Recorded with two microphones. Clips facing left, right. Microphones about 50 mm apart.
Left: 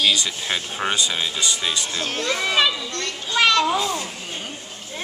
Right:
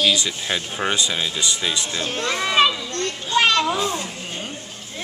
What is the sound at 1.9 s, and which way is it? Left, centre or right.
Speech, right.